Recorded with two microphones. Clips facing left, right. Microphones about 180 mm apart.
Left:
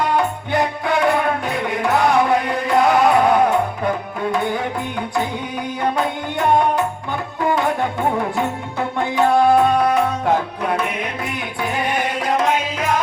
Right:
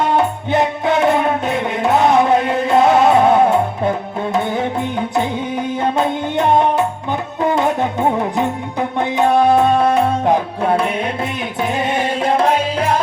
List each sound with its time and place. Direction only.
0.0 s music: 25° right (ahead or behind)